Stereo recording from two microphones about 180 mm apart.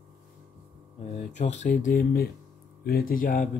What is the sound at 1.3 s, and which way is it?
Speech, 40° left (ahead or behind).